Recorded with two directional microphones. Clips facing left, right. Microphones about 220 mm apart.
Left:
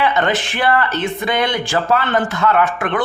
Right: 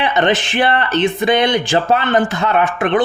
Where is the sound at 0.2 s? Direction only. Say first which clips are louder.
Right 3 dB; 20° right (ahead or behind).